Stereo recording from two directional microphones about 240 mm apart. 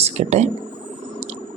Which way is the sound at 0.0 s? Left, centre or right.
Right.